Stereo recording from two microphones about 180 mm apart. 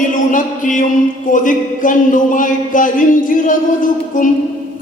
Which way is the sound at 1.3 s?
45° left (ahead or behind).